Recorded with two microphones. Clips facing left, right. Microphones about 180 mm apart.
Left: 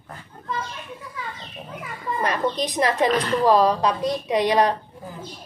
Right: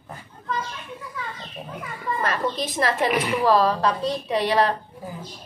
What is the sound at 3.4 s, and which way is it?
A woman's voice, 15° left (ahead or behind).